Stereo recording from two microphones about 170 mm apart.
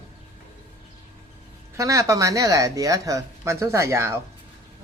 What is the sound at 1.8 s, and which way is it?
Speech, 20° right (ahead or behind).